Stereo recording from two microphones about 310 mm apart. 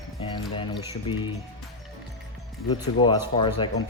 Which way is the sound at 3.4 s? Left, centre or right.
Centre.